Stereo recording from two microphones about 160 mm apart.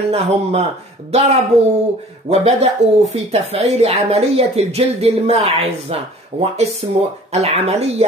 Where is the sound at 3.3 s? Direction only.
40° right (ahead or behind).